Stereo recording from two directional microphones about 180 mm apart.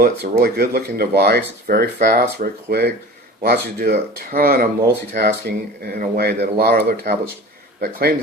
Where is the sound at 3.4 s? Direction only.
50° right (ahead or behind).